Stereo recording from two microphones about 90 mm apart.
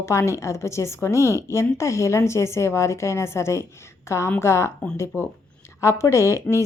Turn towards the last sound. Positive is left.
turn(degrees=30)  # may be behind; listen again after turning